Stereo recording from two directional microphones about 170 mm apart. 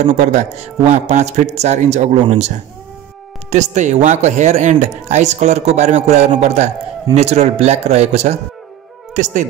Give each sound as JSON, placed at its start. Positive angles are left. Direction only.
{"t": 0.0, "sound": "a man's voice", "side_deg": -45}